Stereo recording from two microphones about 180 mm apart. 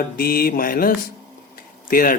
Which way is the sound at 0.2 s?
55° left (ahead or behind).